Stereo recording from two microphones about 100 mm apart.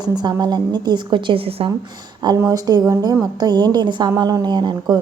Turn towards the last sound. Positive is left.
turn(degrees=-45)  # may be behind; listen again after turning